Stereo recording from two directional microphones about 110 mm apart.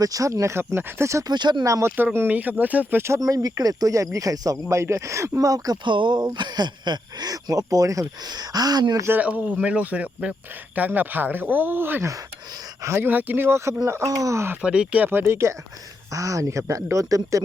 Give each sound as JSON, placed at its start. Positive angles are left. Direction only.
{"t": 0.0, "sound": "speech", "side_deg": -30}
{"t": 1.3, "sound": "speech", "side_deg": -40}
{"t": 1.6, "sound": "speech", "side_deg": -25}
{"t": 2.1, "sound": "speech", "side_deg": -15}
{"t": 9.0, "sound": "speech", "side_deg": -15}
{"t": 14.6, "sound": "speech", "side_deg": -10}